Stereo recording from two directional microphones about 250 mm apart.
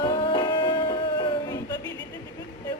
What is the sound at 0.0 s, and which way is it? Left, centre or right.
Music, centre.